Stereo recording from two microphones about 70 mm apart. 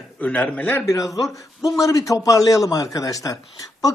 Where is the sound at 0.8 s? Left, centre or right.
Left.